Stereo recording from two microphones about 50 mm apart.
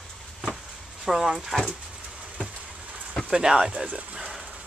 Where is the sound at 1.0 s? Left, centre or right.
Centre.